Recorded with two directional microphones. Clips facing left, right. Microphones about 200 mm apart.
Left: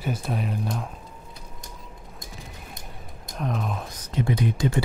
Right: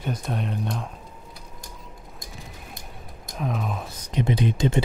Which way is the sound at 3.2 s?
Centre (ahead or behind).